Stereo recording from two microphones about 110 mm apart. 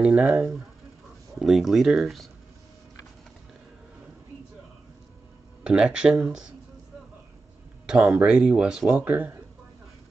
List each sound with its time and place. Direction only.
0.2 s speech: 20° right (ahead or behind)
1.4 s speech: centre (ahead or behind)
5.6 s speech: 10° right (ahead or behind)
7.8 s speech: 5° right (ahead or behind)
8.9 s speech: 15° right (ahead or behind)